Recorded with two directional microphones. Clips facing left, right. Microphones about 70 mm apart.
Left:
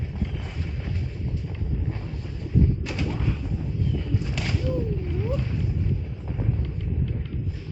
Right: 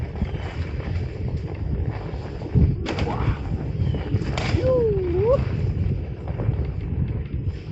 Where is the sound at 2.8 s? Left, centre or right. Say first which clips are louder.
Right 3 dB; right.